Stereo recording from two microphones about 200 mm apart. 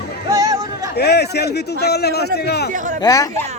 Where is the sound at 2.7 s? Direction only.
40° right (ahead or behind).